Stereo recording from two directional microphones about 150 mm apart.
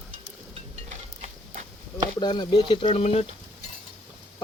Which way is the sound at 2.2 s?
30° left (ahead or behind).